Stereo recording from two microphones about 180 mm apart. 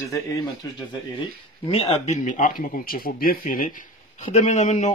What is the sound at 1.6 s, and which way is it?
Speech, 35° left (ahead or behind).